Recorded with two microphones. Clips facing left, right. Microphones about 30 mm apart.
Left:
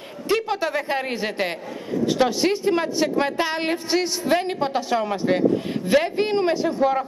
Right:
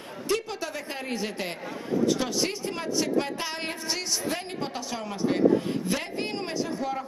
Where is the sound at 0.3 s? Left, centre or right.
Left.